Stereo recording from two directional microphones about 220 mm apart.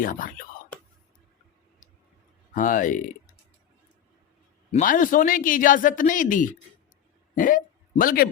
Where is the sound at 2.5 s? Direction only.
35° left (ahead or behind).